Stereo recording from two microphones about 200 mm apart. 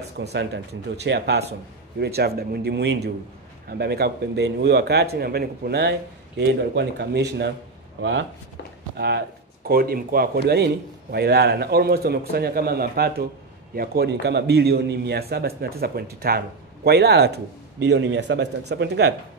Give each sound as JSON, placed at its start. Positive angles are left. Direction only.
{"t": 0.2, "sound": "a man's voice", "side_deg": -55}
{"t": 8.9, "sound": "a man's voice", "side_deg": -55}